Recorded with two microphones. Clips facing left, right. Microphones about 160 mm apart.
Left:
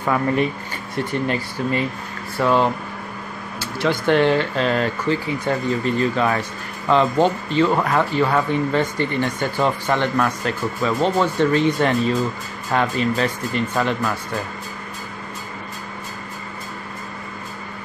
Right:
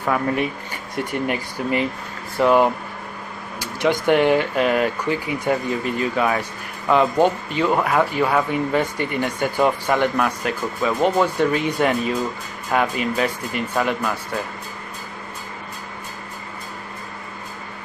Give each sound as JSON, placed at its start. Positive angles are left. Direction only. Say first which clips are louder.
{"t": 0.0, "sound": "speech", "louder": "left 2 dB", "side_deg": -5}
{"t": 0.9, "sound": "speech", "louder": "left 1 dB", "side_deg": -15}